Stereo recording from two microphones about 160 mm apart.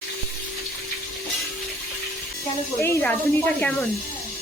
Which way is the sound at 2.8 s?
15° left (ahead or behind).